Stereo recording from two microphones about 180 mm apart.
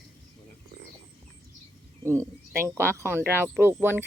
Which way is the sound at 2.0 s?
15° right (ahead or behind).